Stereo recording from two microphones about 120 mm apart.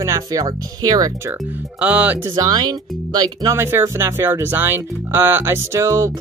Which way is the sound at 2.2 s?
35° right (ahead or behind).